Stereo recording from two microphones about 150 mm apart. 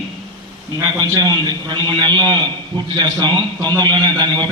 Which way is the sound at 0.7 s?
25° right (ahead or behind).